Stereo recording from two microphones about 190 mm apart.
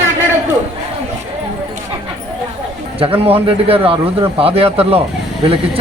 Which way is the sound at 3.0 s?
30° right (ahead or behind).